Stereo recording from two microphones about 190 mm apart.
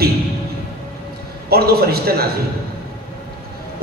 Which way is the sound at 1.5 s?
55° right (ahead or behind).